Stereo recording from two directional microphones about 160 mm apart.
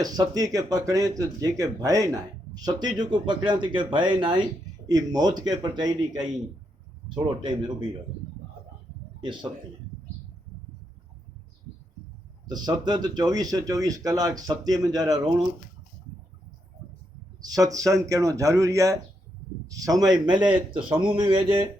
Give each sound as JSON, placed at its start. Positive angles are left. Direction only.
{"t": 0.0, "sound": "speech", "side_deg": -25}
{"t": 9.2, "sound": "speech", "side_deg": -30}
{"t": 12.5, "sound": "speech", "side_deg": -25}
{"t": 17.4, "sound": "speech", "side_deg": -20}